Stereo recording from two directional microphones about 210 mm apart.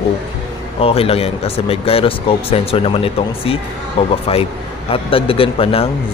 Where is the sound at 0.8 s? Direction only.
30° left (ahead or behind).